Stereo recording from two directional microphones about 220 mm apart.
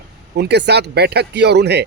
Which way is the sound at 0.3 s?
50° right (ahead or behind).